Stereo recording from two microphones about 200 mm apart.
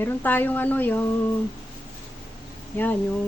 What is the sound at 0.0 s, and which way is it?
Speech, 10° left (ahead or behind).